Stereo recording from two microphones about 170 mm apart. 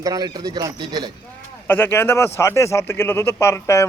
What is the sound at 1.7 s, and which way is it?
Speech, 10° left (ahead or behind).